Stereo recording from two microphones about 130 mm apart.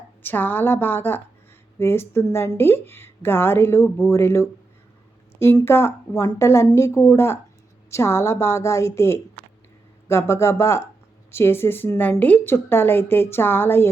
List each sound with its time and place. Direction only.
0.2 s a woman's voice: 15° left (ahead or behind)